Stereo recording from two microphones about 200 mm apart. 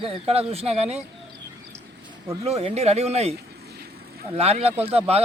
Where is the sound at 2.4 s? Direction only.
30° right (ahead or behind).